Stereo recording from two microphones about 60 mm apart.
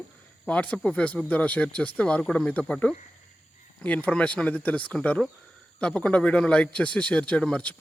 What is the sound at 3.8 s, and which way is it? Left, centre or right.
Speech, left.